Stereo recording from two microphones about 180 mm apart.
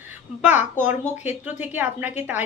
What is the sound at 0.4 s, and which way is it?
Speech, 10° right (ahead or behind).